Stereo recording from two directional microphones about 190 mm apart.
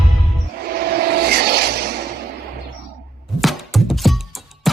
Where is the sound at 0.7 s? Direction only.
55° right (ahead or behind).